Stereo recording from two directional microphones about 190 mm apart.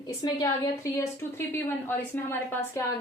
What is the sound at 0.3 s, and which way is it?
A woman's voice, 15° left (ahead or behind).